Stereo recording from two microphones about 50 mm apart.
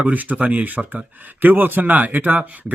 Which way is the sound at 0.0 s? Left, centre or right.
Right.